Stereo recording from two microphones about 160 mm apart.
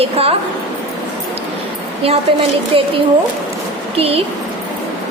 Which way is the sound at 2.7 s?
35° right (ahead or behind).